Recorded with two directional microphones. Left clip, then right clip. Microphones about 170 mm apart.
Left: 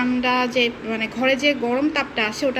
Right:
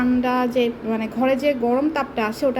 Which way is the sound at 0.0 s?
5° right (ahead or behind).